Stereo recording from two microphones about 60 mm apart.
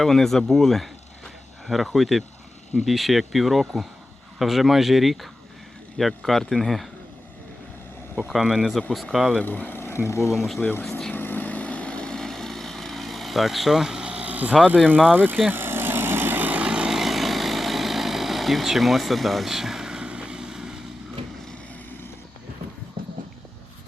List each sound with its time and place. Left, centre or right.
0.0 s speech: centre
8.3 s speech: centre
9.4 s speech: left
10.3 s speech: centre
10.6 s speech: left
11.1 s vehicle: left; by 17.0 s centre
17.0 s vehicle: centre